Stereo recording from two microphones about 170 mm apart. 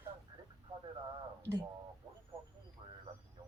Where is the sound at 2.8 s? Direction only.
25° right (ahead or behind).